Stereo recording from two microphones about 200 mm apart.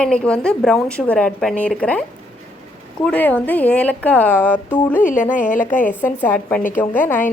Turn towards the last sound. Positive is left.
turn(degrees=10)  # may be behind; listen again after turning